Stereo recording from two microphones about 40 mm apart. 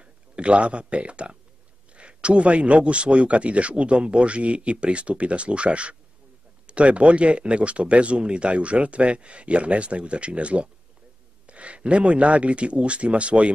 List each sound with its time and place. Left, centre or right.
0.0 s speech: right